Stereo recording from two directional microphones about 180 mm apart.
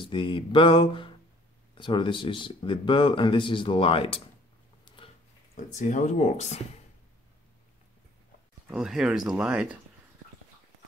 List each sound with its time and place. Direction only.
0.0 s speech: 25° left (ahead or behind)
4.8 s a sound: 30° left (ahead or behind)
5.8 s speech: 45° left (ahead or behind)
8.6 s speech: 5° right (ahead or behind)